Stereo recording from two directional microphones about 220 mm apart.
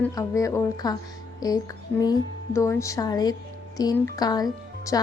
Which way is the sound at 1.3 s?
15° left (ahead or behind).